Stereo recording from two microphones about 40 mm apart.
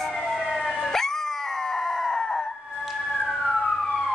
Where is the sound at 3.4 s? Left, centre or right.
Centre.